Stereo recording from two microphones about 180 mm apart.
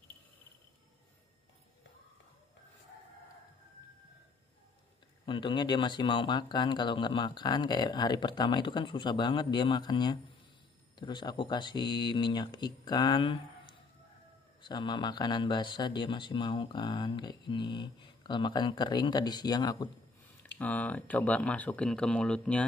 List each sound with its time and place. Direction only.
5.2 s speech: 25° left (ahead or behind)
20.5 s speech: 10° left (ahead or behind)